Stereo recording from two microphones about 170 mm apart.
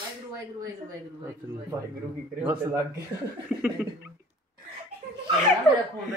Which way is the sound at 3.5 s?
10° right (ahead or behind).